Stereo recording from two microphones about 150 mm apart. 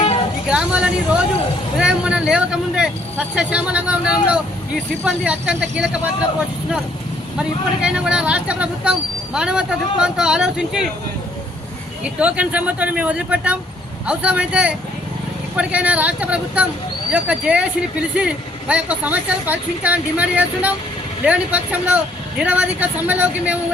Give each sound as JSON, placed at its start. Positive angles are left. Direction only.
{"t": 0.4, "sound": "a sound", "side_deg": -5}
{"t": 1.8, "sound": "speech", "side_deg": -5}
{"t": 7.3, "sound": "speech", "side_deg": -5}
{"t": 12.0, "sound": "speech", "side_deg": -10}